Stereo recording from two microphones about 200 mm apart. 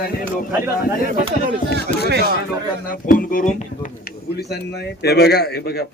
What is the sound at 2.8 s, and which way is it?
Speech, 40° left (ahead or behind).